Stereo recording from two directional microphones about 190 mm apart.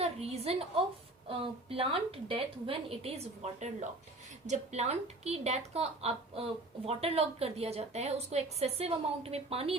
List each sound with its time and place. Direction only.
0.0 s a woman's voice: 35° right (ahead or behind)